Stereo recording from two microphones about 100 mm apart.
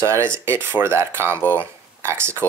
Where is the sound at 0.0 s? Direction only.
30° right (ahead or behind).